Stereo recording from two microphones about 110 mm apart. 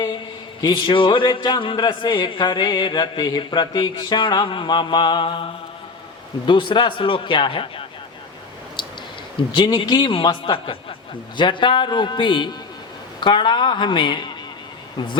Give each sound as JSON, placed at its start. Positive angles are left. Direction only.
{"t": 0.6, "sound": "a man's voice", "side_deg": 40}
{"t": 9.4, "sound": "a man's voice", "side_deg": 50}